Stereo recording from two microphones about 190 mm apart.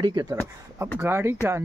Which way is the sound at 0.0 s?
20° right (ahead or behind).